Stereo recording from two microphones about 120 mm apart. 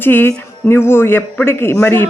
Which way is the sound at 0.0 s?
20° left (ahead or behind).